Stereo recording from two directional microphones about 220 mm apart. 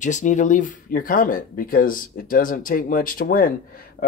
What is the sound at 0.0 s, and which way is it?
Speech, 35° left (ahead or behind).